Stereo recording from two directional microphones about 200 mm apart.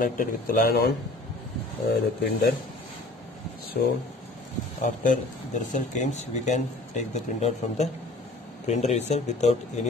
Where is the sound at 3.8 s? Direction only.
50° left (ahead or behind).